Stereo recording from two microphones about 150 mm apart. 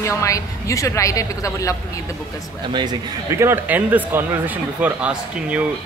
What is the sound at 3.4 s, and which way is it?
Speech, 15° right (ahead or behind).